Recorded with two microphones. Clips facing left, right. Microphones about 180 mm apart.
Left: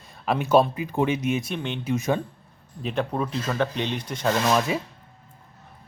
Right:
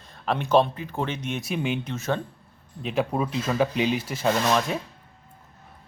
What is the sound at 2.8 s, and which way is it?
Speech, 5° right (ahead or behind).